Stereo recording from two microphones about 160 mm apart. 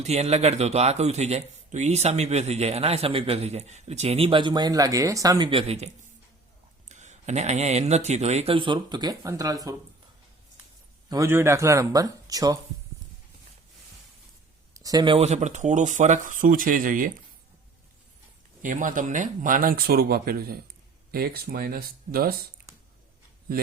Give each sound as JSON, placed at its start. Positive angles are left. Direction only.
{"t": 0.0, "sound": "speech", "side_deg": -45}
{"t": 11.1, "sound": "speech", "side_deg": -15}
{"t": 14.7, "sound": "speech", "side_deg": -25}
{"t": 18.6, "sound": "speech", "side_deg": -55}